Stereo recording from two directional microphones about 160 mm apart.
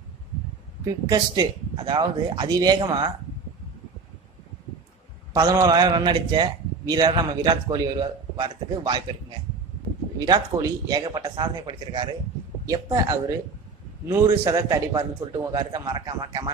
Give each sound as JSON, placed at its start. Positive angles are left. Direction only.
{"t": 0.8, "sound": "a man's voice", "side_deg": -25}
{"t": 5.3, "sound": "a man's voice", "side_deg": -25}
{"t": 10.1, "sound": "a man's voice", "side_deg": -25}